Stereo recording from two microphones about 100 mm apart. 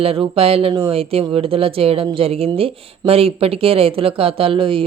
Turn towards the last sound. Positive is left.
turn(degrees=-60)  # may be behind; listen again after turning